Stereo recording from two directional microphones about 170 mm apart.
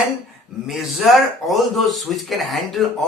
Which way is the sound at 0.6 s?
Centre (ahead or behind).